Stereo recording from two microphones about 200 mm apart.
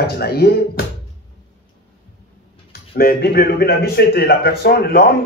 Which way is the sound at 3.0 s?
50° left (ahead or behind).